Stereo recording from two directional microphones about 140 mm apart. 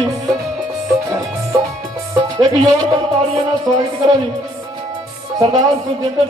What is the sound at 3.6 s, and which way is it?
A man's voice, 30° right (ahead or behind).